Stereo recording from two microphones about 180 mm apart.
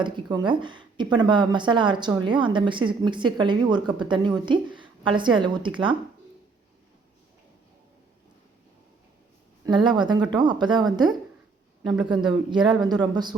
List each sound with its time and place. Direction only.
0.0 s speech: 25° right (ahead or behind)
9.6 s speech: 25° right (ahead or behind)
11.8 s speech: centre (ahead or behind)
12.5 s speech: 25° right (ahead or behind)